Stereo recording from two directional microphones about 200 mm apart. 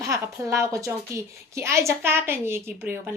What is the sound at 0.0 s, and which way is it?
A woman's voice, 15° right (ahead or behind).